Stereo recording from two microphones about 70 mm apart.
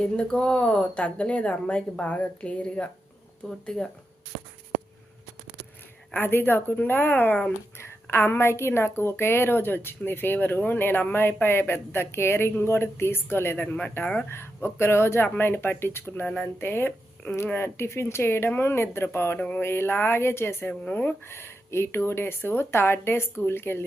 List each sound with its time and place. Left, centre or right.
0.0 s speech: centre
6.1 s speech: left
7.8 s a woman's voice: left
13.7 s speech: left
14.3 s a woman's voice: left
19.4 s speech: centre
19.6 s a woman's voice: left
20.8 s speech: left
21.2 s a woman's voice: left